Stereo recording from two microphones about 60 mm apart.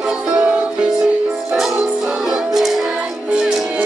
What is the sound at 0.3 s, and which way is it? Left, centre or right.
Music, right.